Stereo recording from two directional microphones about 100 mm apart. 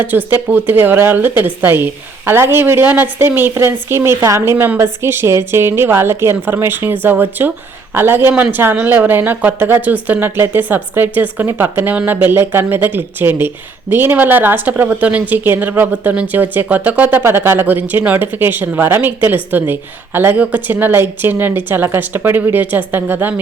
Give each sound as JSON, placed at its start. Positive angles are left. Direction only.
{"t": 0.3, "sound": "a woman's voice", "side_deg": -20}